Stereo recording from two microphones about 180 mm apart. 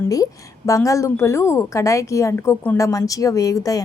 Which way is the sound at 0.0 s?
20° left (ahead or behind).